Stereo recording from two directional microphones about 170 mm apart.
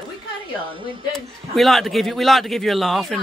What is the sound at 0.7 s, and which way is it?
Speech, 30° right (ahead or behind).